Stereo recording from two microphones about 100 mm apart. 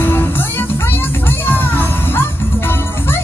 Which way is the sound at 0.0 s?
20° left (ahead or behind).